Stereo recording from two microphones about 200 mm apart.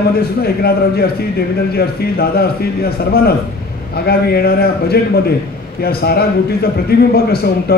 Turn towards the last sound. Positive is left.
turn(degrees=50)  # may be behind; listen again after turning